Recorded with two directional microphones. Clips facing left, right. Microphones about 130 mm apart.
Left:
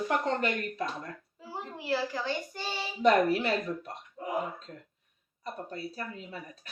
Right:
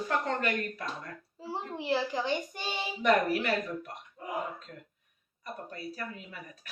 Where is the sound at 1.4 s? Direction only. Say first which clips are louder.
Right 4 dB; 25° right (ahead or behind).